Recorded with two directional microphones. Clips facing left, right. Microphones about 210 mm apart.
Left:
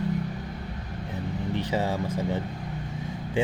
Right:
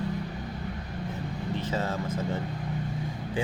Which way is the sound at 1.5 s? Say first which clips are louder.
Left 3 dB; 15° left (ahead or behind).